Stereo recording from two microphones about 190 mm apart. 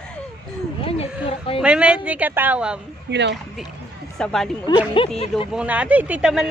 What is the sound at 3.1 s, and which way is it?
Speech, 65° right (ahead or behind).